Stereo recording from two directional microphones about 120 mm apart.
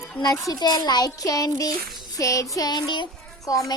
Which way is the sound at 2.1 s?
25° left (ahead or behind).